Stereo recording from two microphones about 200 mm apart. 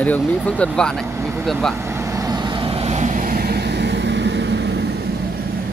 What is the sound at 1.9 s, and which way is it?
Vehicle, 15° right (ahead or behind).